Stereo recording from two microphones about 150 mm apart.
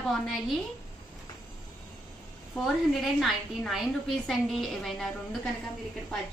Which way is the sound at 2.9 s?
Centre (ahead or behind).